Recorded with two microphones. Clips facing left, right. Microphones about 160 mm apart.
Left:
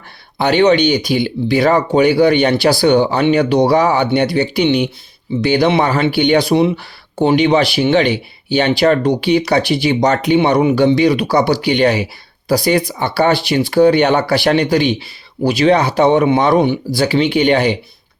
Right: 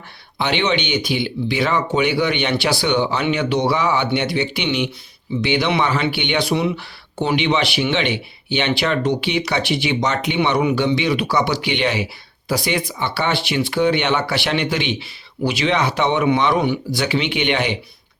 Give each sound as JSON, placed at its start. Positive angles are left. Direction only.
{"t": 0.3, "sound": "speech", "side_deg": 40}